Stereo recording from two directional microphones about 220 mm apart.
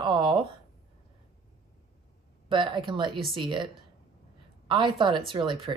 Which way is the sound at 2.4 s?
20° right (ahead or behind).